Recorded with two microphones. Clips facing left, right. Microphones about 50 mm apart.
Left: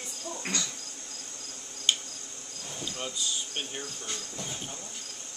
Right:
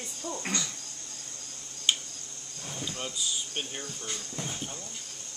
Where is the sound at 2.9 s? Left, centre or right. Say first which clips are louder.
Left 1 dB; centre.